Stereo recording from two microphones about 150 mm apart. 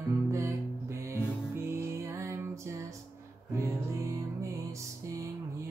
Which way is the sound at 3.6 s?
20° right (ahead or behind).